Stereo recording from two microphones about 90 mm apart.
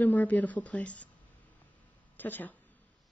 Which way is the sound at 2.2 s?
20° left (ahead or behind).